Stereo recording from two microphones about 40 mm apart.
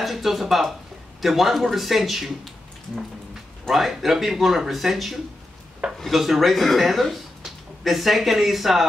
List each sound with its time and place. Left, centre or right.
0.0 s speech: centre
3.7 s speech: centre
5.8 s dishes: centre
6.1 s speech: centre